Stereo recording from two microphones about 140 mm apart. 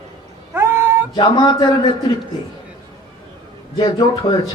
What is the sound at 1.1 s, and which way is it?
Speech, 30° left (ahead or behind).